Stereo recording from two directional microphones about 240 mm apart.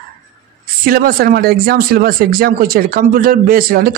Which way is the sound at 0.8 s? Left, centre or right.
Right.